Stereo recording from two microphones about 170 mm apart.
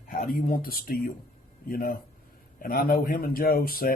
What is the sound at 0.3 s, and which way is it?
Speech, 55° left (ahead or behind).